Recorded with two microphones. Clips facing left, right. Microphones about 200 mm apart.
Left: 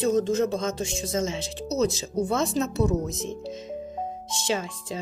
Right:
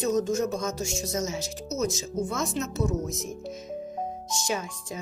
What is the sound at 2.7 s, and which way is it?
Speech, 65° left (ahead or behind).